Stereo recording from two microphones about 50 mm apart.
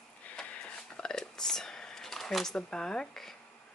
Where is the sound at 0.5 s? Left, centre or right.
Left.